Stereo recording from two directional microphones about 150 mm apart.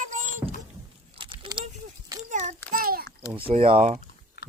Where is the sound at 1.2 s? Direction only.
35° right (ahead or behind).